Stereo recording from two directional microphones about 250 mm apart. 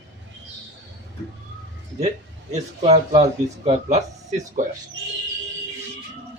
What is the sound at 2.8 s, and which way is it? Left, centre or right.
Speech, right.